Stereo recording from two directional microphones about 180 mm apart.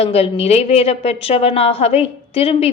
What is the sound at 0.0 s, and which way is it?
A woman's voice, 35° left (ahead or behind).